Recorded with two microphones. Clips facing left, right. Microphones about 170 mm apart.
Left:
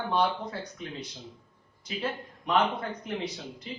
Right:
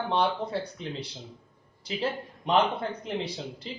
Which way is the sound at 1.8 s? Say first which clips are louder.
Right 3 dB; 30° right (ahead or behind).